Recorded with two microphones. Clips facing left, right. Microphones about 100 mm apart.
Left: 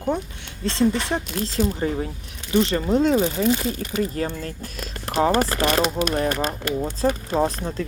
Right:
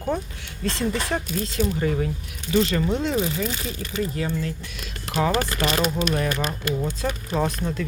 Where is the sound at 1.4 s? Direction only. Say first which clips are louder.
Left 2 dB; 35° left (ahead or behind).